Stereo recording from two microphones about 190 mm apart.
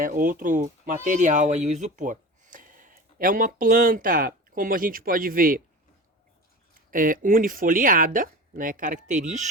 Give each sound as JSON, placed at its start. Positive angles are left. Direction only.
{"t": 0.0, "sound": "speech", "side_deg": -45}
{"t": 6.9, "sound": "speech", "side_deg": -45}